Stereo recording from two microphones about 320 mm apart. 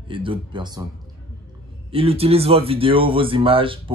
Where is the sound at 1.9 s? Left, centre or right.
Centre.